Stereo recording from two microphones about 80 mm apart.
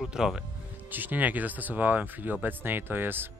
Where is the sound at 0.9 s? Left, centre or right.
Right.